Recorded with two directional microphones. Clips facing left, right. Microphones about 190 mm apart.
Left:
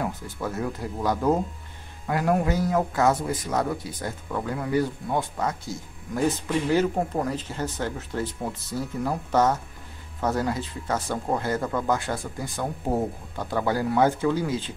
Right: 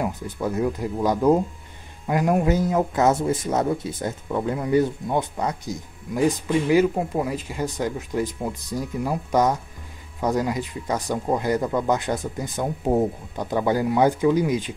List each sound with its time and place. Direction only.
0.0 s a man's voice: 15° right (ahead or behind)